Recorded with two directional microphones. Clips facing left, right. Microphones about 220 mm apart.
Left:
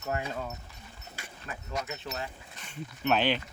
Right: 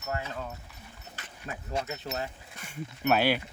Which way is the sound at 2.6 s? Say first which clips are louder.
Right 2 dB; 10° right (ahead or behind).